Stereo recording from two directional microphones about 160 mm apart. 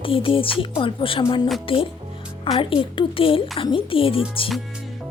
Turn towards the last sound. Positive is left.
turn(degrees=35)  # may be behind; listen again after turning